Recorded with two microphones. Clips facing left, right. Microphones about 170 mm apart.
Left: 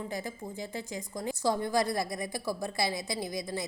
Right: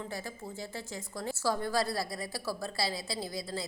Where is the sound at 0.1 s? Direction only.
15° left (ahead or behind).